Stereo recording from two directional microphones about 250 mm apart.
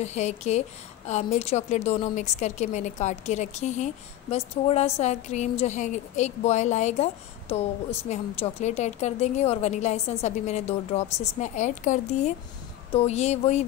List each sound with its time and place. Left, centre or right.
0.0 s a woman's voice: left